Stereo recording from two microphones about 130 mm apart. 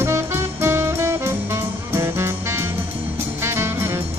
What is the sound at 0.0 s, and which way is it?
Music, 20° right (ahead or behind).